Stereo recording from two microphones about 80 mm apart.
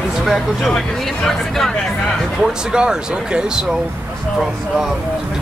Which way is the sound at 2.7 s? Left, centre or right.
Centre.